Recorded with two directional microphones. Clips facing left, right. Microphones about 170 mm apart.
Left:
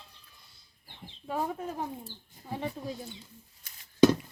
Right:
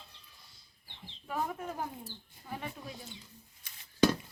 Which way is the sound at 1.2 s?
30° left (ahead or behind).